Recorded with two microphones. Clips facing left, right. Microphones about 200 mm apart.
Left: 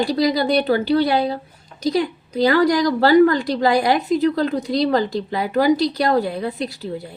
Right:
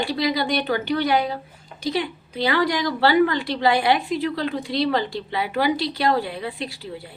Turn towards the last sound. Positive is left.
turn(degrees=40)  # may be behind; listen again after turning